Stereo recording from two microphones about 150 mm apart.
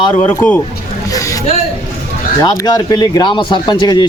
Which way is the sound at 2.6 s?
25° left (ahead or behind).